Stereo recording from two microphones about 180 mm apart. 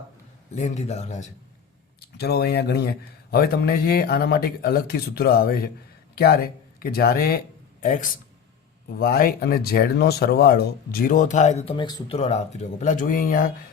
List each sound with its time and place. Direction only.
0.5 s speech: 40° left (ahead or behind)
2.1 s speech: 65° left (ahead or behind)